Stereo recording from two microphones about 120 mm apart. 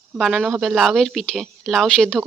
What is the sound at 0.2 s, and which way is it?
Speech, centre (ahead or behind).